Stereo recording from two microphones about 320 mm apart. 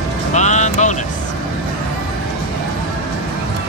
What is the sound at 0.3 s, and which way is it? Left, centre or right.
Vehicle, left.